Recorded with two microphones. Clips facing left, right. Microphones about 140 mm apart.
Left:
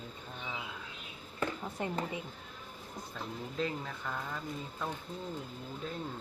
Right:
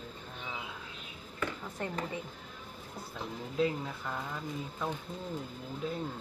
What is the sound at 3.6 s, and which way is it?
Speech, 5° right (ahead or behind).